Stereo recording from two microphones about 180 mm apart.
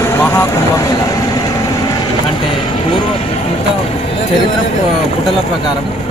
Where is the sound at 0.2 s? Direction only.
15° left (ahead or behind).